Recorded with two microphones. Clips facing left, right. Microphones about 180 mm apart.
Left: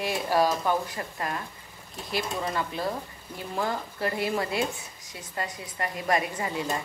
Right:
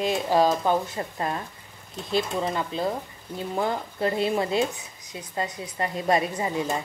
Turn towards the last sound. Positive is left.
turn(degrees=-20)  # may be behind; listen again after turning